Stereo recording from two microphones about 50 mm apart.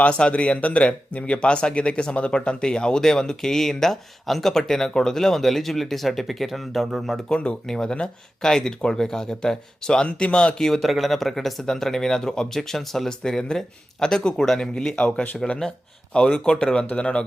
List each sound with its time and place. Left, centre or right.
0.0 s speech: left; by 7.2 s centre
7.3 s speech: centre
10.6 s speech: centre; by 17.2 s left